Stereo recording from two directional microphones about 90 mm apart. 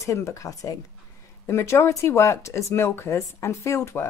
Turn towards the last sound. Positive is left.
turn(degrees=30)  # may be behind; listen again after turning